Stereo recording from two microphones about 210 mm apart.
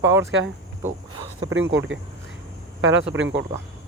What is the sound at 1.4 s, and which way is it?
Speech, 65° right (ahead or behind).